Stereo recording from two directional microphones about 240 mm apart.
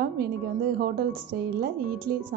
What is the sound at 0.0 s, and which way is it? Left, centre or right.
A woman's voice, right.